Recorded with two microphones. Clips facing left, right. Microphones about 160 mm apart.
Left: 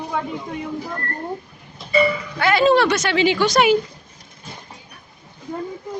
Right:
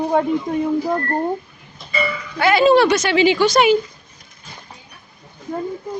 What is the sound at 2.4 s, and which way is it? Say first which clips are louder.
Speech: right 3 dB; 5° right (ahead or behind).